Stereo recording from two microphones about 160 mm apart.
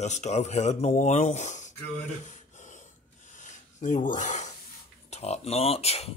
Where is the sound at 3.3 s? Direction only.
50° left (ahead or behind).